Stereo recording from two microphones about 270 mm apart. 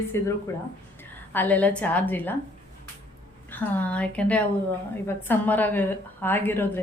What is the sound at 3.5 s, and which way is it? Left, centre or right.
A woman's voice, centre.